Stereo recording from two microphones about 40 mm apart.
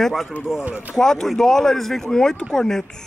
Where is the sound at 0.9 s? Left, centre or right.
Centre.